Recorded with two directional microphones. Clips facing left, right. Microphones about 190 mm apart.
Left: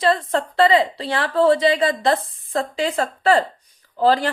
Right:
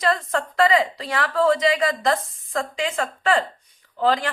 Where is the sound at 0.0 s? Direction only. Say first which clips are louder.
Left 3 dB; 30° left (ahead or behind).